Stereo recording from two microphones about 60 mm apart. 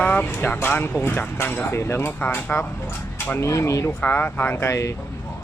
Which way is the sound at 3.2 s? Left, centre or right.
Left.